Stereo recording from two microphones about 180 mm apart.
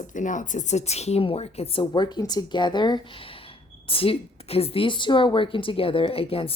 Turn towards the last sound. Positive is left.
turn(degrees=30)  # may be behind; listen again after turning